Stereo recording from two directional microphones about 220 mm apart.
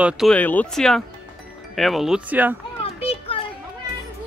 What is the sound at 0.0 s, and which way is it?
Speech, centre (ahead or behind).